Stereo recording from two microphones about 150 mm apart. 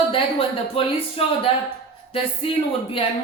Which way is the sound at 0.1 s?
35° left (ahead or behind).